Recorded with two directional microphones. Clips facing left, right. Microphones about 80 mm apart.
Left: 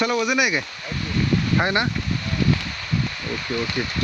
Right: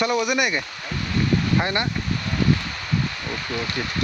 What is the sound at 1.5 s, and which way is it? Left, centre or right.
Speech, centre.